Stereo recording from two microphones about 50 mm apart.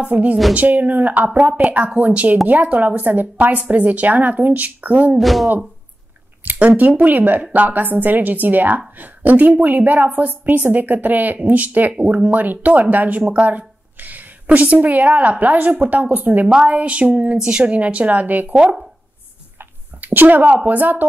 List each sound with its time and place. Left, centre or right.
0.0 s a woman's voice: right
5.2 s speech: centre
6.4 s a sound: right
7.0 s a woman's voice: right
16.4 s a woman's voice: right
17.6 s a woman's voice: right
19.6 s speech: right